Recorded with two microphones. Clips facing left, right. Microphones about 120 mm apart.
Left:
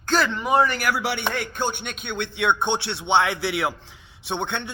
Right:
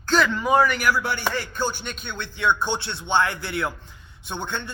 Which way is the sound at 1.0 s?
75° left (ahead or behind).